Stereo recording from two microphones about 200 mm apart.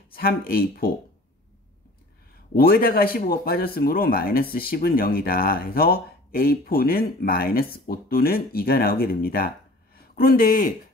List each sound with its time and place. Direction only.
0.1 s speech: 50° left (ahead or behind)
2.5 s speech: 50° left (ahead or behind)